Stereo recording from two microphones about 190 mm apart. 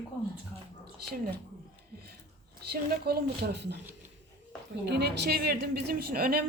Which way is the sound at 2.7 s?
55° right (ahead or behind).